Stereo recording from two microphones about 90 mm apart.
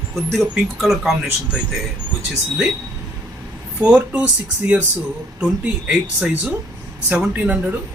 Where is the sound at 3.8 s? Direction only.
10° right (ahead or behind).